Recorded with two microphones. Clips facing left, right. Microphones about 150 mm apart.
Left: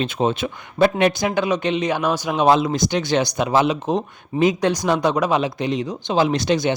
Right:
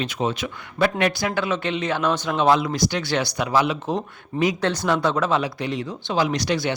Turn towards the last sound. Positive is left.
turn(degrees=20)  # may be behind; listen again after turning